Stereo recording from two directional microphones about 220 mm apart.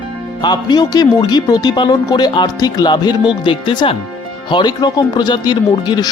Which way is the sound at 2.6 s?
15° left (ahead or behind).